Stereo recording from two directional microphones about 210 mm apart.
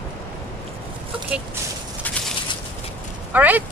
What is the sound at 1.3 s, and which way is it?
Speech, 5° right (ahead or behind).